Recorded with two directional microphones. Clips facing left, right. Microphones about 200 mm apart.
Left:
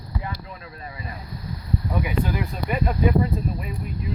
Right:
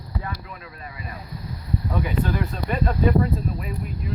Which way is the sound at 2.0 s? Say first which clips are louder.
Right 1 dB; 10° left (ahead or behind).